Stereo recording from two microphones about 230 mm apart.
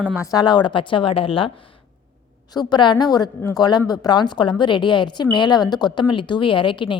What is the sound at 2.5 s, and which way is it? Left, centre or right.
A woman's voice, centre.